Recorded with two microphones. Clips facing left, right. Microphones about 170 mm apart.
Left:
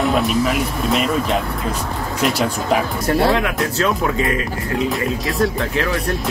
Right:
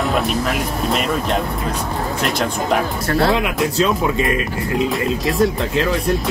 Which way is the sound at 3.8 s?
20° right (ahead or behind).